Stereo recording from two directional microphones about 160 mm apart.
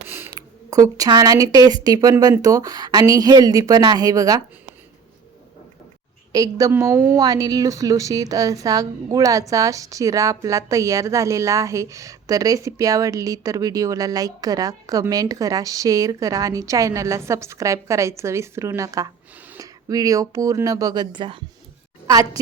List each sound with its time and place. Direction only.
0.3 s a woman's voice: 20° right (ahead or behind)
6.3 s a woman's voice: 20° right (ahead or behind)